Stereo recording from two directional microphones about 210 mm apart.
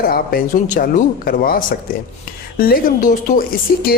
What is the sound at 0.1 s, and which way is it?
Speech, 45° left (ahead or behind).